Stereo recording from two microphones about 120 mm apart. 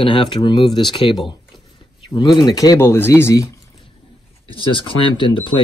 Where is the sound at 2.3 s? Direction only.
35° left (ahead or behind).